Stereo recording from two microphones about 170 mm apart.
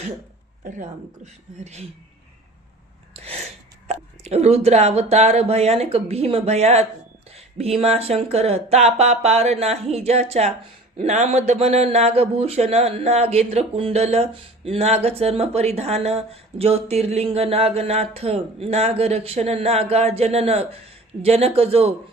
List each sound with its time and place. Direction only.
0.8 s a man's voice: 40° right (ahead or behind)
3.8 s a man's voice: 40° right (ahead or behind)